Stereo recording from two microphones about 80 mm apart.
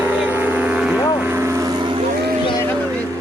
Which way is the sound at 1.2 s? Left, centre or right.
Right.